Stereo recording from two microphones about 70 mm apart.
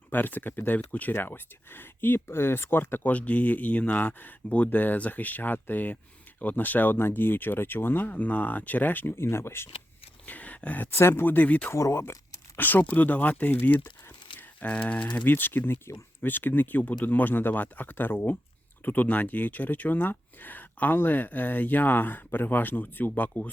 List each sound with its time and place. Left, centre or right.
0.1 s speech: left
10.2 s a sound: left
10.9 s speech: left
11.7 s speech: left
12.5 s speech: left